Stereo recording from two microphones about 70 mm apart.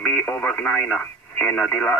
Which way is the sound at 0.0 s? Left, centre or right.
Centre.